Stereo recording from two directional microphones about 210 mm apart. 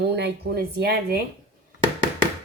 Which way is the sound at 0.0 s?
50° right (ahead or behind).